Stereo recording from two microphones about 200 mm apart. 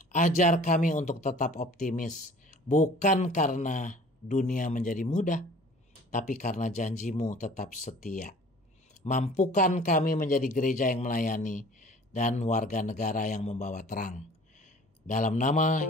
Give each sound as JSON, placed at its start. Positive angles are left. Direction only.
{"t": 0.0, "sound": "a man's voice", "side_deg": 40}